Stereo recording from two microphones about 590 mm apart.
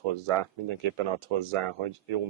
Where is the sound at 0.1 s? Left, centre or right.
Right.